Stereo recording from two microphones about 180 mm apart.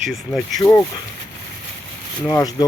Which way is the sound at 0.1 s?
Centre (ahead or behind).